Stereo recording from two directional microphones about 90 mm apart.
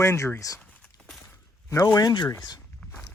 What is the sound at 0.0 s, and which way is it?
Speech, 30° left (ahead or behind).